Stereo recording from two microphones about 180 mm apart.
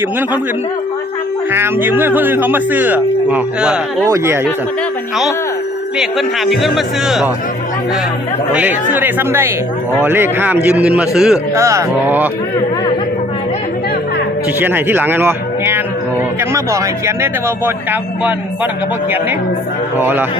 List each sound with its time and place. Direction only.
1.5 s speech: 10° right (ahead or behind)
6.0 s a man's voice: centre (ahead or behind)
8.5 s a man's voice: 10° right (ahead or behind)
11.5 s speech: 15° right (ahead or behind)
14.6 s speech: 10° right (ahead or behind)
20.0 s speech: 10° right (ahead or behind)